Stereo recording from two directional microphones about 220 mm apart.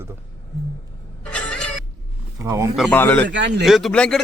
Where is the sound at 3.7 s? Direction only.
Centre (ahead or behind).